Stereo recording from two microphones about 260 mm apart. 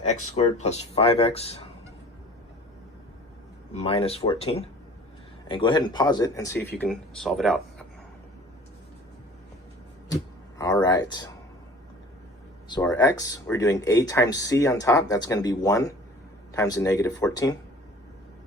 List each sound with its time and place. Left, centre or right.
0.0 s speech: left
3.8 s speech: left; by 7.9 s centre
10.6 s speech: centre
12.6 s speech: centre